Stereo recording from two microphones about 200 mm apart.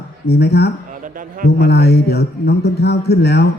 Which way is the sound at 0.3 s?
55° left (ahead or behind).